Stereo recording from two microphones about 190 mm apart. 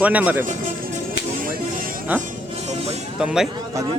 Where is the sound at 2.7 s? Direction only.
35° right (ahead or behind).